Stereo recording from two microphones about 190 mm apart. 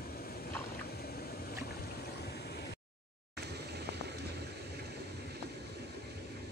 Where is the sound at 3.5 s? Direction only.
60° right (ahead or behind).